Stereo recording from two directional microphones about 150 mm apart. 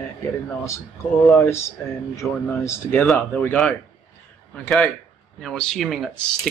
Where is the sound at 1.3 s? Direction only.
20° left (ahead or behind).